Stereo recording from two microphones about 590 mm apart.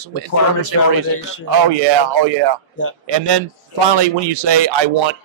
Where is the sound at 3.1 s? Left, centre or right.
Right.